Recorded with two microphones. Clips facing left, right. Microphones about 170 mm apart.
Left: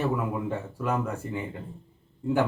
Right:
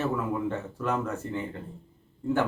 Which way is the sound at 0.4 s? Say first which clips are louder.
Even; 10° left (ahead or behind).